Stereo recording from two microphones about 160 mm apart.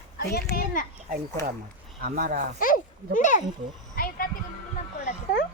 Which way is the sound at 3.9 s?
65° left (ahead or behind).